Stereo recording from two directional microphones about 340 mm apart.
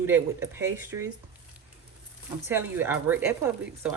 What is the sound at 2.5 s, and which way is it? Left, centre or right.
Speech, centre.